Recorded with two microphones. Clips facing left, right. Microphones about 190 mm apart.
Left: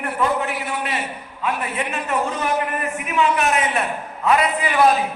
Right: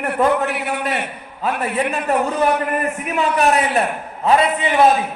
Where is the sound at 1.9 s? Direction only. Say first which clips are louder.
Right 4 dB; 35° right (ahead or behind).